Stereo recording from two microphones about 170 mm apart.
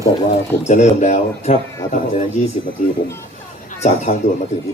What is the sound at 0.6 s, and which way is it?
Speech, 45° left (ahead or behind).